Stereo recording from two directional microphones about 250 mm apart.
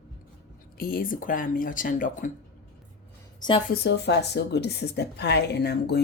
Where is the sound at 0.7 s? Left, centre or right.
Left.